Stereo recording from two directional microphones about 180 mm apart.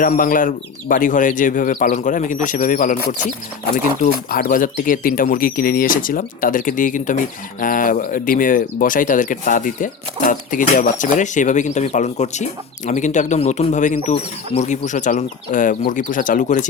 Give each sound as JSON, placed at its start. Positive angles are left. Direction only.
{"t": 0.0, "sound": "speech", "side_deg": 50}